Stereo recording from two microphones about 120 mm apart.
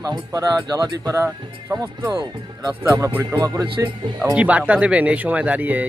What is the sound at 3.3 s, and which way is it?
Speech, 30° right (ahead or behind).